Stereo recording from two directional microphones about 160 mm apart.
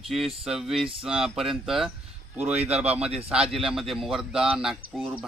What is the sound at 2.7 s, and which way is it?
Speech, 40° right (ahead or behind).